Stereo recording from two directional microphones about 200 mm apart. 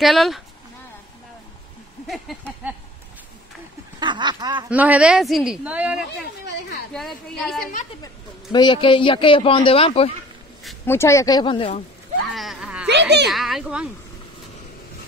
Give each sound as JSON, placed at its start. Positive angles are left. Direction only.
{"t": 0.0, "sound": "speech", "side_deg": 0}
{"t": 2.0, "sound": "a sound", "side_deg": 0}
{"t": 4.0, "sound": "speech", "side_deg": -20}
{"t": 4.6, "sound": "speech", "side_deg": -5}
{"t": 8.0, "sound": "speech", "side_deg": 20}
{"t": 10.9, "sound": "speech", "side_deg": 15}
{"t": 12.3, "sound": "a sound", "side_deg": 0}
{"t": 12.8, "sound": "speech", "side_deg": -60}
{"t": 13.3, "sound": "speech", "side_deg": 0}